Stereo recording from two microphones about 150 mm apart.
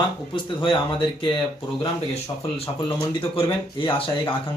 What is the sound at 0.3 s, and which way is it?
Speech, 35° left (ahead or behind).